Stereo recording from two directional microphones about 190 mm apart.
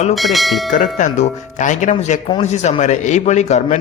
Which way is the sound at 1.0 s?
40° left (ahead or behind).